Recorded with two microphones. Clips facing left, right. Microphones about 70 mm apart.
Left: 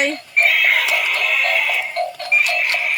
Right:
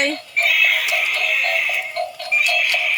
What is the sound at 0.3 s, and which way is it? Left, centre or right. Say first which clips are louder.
Music: left 3 dB; left.